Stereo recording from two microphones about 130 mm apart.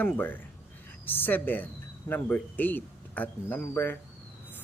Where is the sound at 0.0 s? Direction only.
15° left (ahead or behind).